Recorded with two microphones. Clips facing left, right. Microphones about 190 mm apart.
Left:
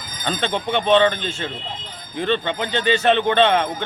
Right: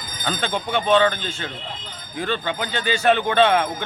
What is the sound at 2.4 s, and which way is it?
Speech, 5° right (ahead or behind).